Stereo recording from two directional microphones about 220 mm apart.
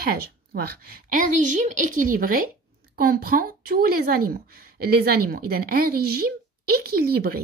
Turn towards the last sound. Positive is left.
turn(degrees=-45)  # may be behind; listen again after turning